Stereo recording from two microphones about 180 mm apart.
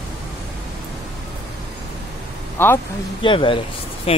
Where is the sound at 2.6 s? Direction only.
10° left (ahead or behind).